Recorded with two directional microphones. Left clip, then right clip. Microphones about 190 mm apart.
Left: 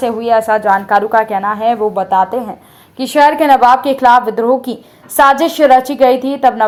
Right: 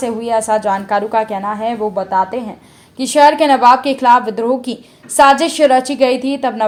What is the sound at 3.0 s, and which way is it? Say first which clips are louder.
A woman's voice: even; 15° left (ahead or behind).